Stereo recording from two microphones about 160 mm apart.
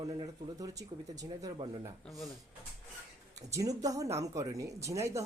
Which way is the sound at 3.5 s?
20° right (ahead or behind).